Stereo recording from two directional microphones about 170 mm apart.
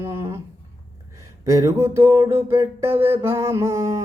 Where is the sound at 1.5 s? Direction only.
20° right (ahead or behind).